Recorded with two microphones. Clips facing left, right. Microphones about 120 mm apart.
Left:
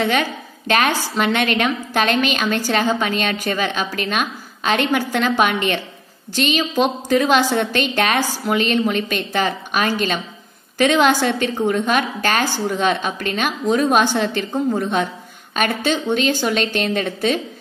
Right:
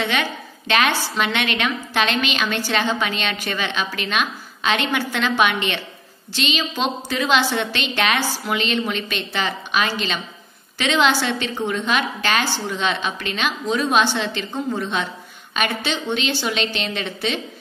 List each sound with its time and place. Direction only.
0.0 s a woman's voice: 40° left (ahead or behind)